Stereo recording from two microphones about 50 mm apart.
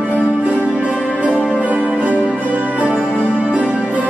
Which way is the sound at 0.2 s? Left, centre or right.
Right.